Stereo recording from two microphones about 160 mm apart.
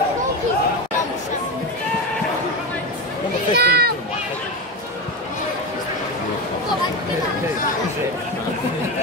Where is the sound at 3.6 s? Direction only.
90° right.